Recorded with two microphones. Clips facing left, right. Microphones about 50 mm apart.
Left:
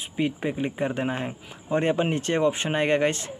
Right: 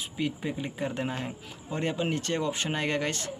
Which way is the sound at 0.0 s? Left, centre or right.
Left.